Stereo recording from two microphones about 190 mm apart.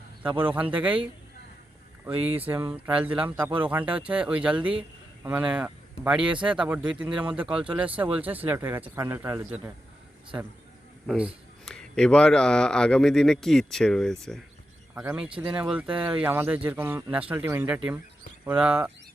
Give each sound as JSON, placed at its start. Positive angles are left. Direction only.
{"t": 0.2, "sound": "speech", "side_deg": -10}
{"t": 2.5, "sound": "speech", "side_deg": -10}
{"t": 11.0, "sound": "speech", "side_deg": 0}